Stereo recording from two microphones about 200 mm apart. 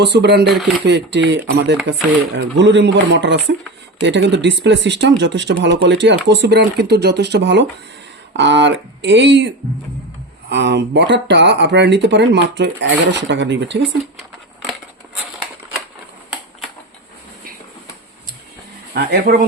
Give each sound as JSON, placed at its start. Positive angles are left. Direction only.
{"t": 0.0, "sound": "speech", "side_deg": -60}
{"t": 10.5, "sound": "speech", "side_deg": -60}
{"t": 14.2, "sound": "a sound", "side_deg": 0}
{"t": 18.9, "sound": "speech", "side_deg": -50}